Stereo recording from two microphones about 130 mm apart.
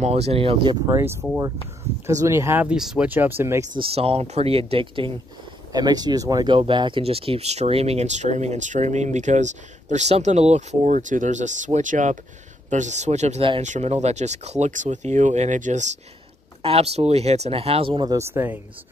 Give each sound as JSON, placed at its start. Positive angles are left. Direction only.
{"t": 0.0, "sound": "speech", "side_deg": -55}
{"t": 0.8, "sound": "speech", "side_deg": -20}
{"t": 2.7, "sound": "speech", "side_deg": -5}
{"t": 3.1, "sound": "speech", "side_deg": -15}
{"t": 3.7, "sound": "speech", "side_deg": -45}
{"t": 5.7, "sound": "speech", "side_deg": -30}
{"t": 16.6, "sound": "speech", "side_deg": -50}
{"t": 18.0, "sound": "speech", "side_deg": -20}